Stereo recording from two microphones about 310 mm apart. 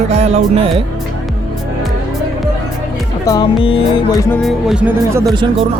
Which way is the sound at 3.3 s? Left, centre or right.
Centre.